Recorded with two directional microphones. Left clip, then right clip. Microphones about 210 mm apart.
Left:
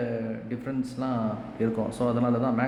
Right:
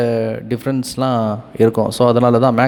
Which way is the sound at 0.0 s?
50° right (ahead or behind).